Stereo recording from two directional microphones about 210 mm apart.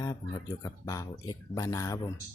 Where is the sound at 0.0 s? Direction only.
15° left (ahead or behind).